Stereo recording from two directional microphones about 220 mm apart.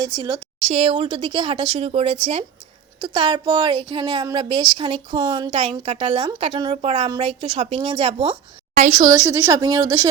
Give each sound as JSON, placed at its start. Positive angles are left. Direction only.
{"t": 0.6, "sound": "a woman's voice", "side_deg": -30}
{"t": 8.7, "sound": "a woman's voice", "side_deg": -35}
{"t": 9.0, "sound": "a woman's voice", "side_deg": -15}